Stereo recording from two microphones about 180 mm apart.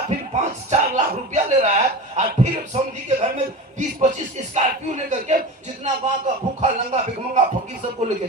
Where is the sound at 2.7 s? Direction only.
40° right (ahead or behind).